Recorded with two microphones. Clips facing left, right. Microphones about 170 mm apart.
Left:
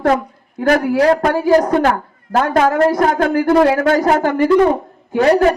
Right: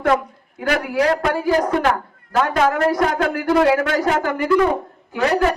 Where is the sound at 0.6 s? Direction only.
40° left (ahead or behind).